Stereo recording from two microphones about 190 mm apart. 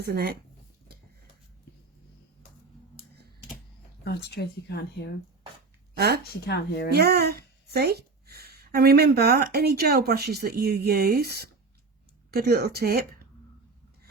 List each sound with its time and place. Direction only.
0.0 s speech: 55° right (ahead or behind)
4.0 s speech: 55° left (ahead or behind)
6.0 s speech: 55° right (ahead or behind)
6.2 s speech: 55° left (ahead or behind)
6.9 s speech: 55° right (ahead or behind)